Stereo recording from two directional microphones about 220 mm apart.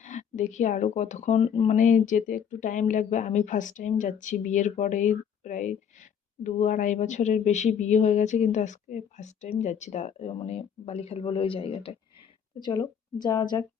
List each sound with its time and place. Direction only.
0.0 s speech: 35° left (ahead or behind); by 13.7 s 15° left (ahead or behind)